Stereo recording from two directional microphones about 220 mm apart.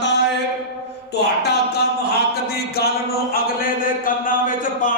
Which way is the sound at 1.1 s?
50° left (ahead or behind).